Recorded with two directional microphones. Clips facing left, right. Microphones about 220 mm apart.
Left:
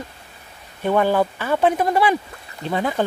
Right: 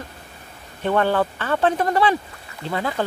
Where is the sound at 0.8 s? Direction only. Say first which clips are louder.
Left 2 dB; 10° left (ahead or behind).